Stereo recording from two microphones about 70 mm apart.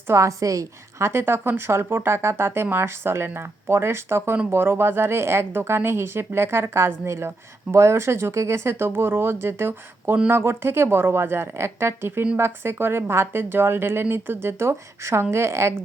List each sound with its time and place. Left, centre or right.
0.1 s speech: right